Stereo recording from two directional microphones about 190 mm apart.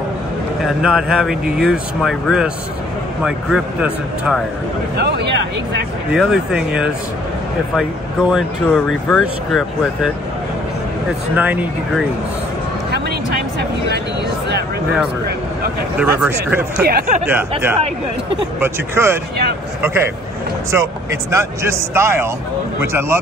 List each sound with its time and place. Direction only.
0.7 s speech: 5° right (ahead or behind)
4.9 s speech: 60° right (ahead or behind)
6.1 s speech: 5° right (ahead or behind)
11.3 s speech: 10° right (ahead or behind)
16.0 s speech: 5° right (ahead or behind)
16.8 s speech: 50° right (ahead or behind)
17.3 s speech: 10° right (ahead or behind)